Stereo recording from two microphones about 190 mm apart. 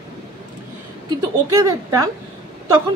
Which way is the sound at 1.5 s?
15° right (ahead or behind).